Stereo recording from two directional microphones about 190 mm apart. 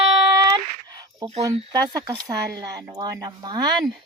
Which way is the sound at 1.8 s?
20° right (ahead or behind).